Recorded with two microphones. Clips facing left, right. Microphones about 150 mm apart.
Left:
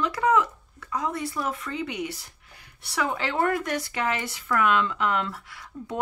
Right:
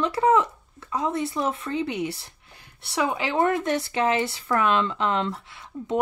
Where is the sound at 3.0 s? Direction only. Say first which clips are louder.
Right 3 dB; 15° right (ahead or behind).